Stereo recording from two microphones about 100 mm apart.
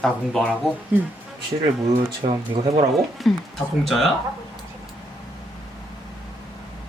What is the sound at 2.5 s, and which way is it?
Speech, 35° right (ahead or behind).